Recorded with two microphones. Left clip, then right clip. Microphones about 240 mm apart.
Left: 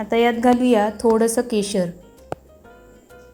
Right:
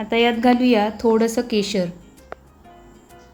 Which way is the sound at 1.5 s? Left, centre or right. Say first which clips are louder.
Right 1 dB; right.